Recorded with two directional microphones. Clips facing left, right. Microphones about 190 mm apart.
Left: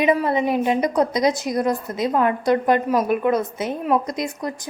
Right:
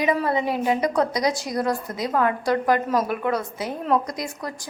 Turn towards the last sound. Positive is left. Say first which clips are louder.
# left 5 dB
turn(degrees=20)  # may be behind; listen again after turning